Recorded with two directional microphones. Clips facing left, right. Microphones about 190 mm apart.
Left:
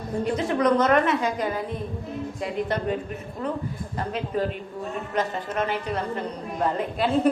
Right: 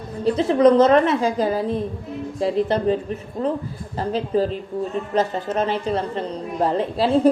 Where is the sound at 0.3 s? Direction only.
30° right (ahead or behind).